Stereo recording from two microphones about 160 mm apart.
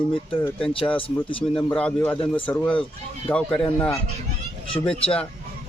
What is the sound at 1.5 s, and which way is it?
A man's voice, 5° left (ahead or behind).